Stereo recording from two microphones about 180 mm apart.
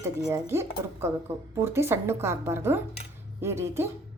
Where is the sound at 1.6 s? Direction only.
15° right (ahead or behind).